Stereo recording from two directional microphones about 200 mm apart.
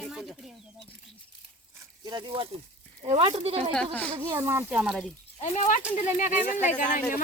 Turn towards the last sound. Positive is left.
turn(degrees=40)  # may be behind; listen again after turning